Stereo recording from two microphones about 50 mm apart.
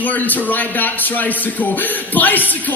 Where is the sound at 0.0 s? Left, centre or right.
Left.